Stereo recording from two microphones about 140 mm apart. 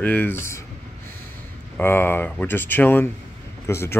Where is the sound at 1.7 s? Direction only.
15° left (ahead or behind).